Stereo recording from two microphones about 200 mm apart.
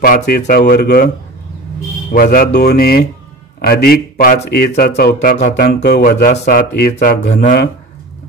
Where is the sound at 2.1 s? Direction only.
45° left (ahead or behind).